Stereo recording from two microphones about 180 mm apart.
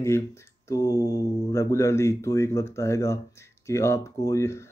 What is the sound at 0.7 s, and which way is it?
Speech, 15° left (ahead or behind).